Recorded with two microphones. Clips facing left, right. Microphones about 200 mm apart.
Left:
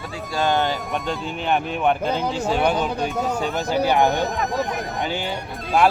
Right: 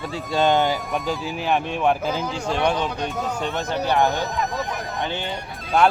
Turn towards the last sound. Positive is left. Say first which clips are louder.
# even
turn(degrees=0)  # may be behind; listen again after turning